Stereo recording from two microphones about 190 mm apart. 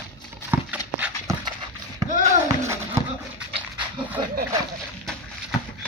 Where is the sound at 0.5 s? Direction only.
10° right (ahead or behind).